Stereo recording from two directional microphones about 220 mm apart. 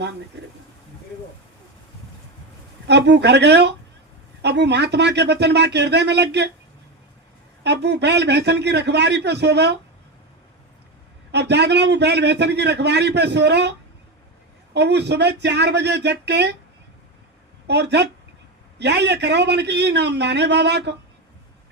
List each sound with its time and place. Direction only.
2.8 s a man's voice: 50° right (ahead or behind)
7.6 s a man's voice: 50° right (ahead or behind)
11.3 s a man's voice: 50° right (ahead or behind)
17.7 s a man's voice: 50° right (ahead or behind)